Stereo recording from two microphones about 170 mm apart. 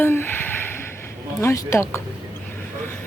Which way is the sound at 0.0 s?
10° left (ahead or behind).